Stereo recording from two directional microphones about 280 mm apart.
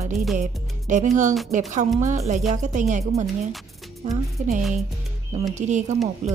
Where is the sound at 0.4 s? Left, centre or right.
Right.